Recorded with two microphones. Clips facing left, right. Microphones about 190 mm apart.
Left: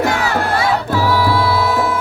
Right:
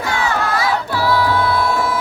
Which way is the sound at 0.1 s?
35° left (ahead or behind).